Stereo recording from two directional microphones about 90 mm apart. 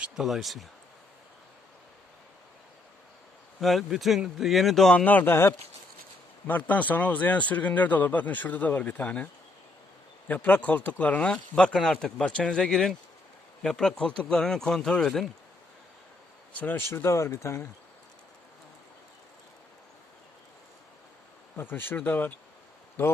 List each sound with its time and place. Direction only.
0.2 s speech: centre (ahead or behind)
3.6 s speech: centre (ahead or behind)
5.0 s speech: 20° left (ahead or behind); by 15.3 s 5° left (ahead or behind)
16.6 s speech: 20° left (ahead or behind)
21.5 s speech: 25° left (ahead or behind)